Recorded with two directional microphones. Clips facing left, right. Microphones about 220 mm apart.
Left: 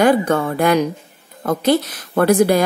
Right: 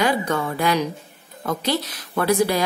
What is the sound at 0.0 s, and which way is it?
A woman's voice, 50° left (ahead or behind).